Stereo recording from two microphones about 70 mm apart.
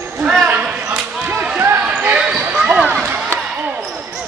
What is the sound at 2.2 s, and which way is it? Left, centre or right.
Basketball bounce, centre.